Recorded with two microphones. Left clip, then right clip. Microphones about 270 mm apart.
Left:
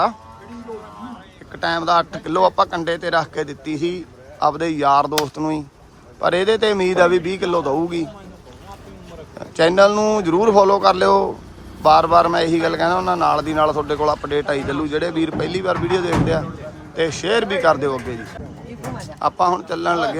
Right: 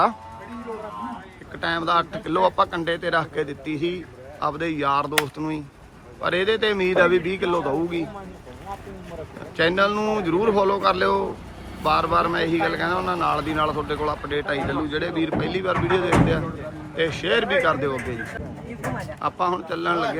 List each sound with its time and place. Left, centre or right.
1.5 s a man's voice: centre
9.6 s a man's voice: centre
19.2 s a man's voice: centre